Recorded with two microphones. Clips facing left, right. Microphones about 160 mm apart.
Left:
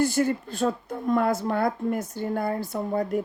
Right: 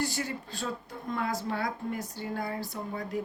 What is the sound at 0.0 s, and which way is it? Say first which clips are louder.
Speech: left 10 dB; 50° left (ahead or behind).